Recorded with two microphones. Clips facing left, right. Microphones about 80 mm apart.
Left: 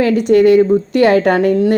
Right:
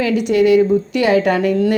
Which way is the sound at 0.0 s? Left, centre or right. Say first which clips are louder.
Left 4 dB; left.